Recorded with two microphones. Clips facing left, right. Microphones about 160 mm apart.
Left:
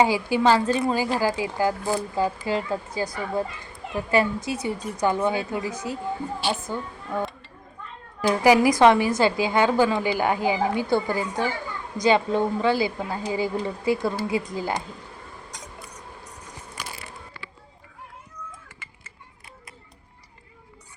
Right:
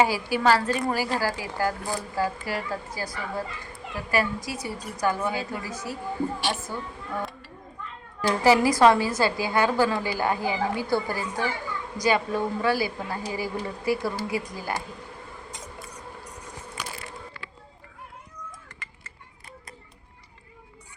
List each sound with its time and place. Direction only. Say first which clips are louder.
0.0 s a woman's voice: left 2 dB; 20° left (ahead or behind)
8.3 s a woman's voice: left 2 dB; 15° left (ahead or behind)